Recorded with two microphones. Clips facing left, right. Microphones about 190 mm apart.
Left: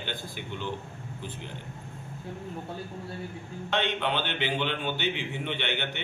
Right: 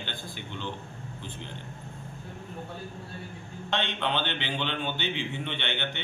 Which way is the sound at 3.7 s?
10° left (ahead or behind).